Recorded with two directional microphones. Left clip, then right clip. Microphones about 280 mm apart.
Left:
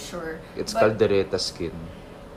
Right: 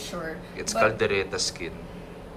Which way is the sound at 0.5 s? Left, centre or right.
Centre.